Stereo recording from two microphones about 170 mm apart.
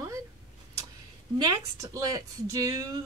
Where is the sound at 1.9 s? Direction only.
20° right (ahead or behind).